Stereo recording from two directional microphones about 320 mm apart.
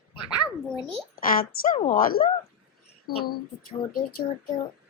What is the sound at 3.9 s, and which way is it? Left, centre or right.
Speech, left.